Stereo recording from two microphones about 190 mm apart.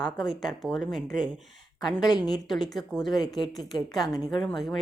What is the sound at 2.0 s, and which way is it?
Speech, 20° left (ahead or behind).